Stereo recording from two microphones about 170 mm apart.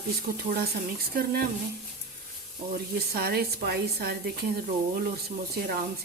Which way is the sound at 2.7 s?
65° right (ahead or behind).